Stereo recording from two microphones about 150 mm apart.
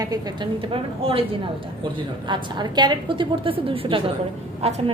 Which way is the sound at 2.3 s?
30° right (ahead or behind).